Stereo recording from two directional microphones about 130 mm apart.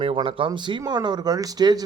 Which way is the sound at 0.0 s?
45° right (ahead or behind).